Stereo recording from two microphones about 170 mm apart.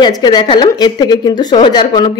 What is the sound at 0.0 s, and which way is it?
Speech, 25° left (ahead or behind).